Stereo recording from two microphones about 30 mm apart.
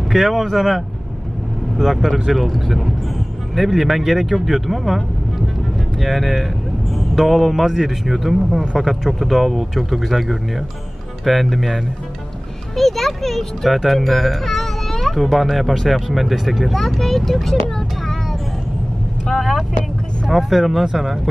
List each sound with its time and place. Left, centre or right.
0.1 s a child's voice: centre
16.7 s speech: centre
20.2 s speech: centre
20.8 s speech: centre